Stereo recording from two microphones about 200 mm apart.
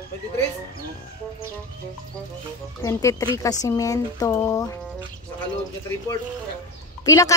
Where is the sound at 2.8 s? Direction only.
15° left (ahead or behind).